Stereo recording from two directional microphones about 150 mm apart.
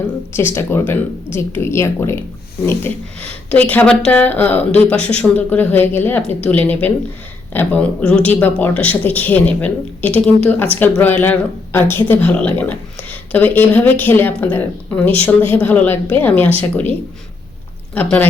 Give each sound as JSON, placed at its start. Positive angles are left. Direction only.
{"t": 0.3, "sound": "speech", "side_deg": 15}
{"t": 17.9, "sound": "speech", "side_deg": 10}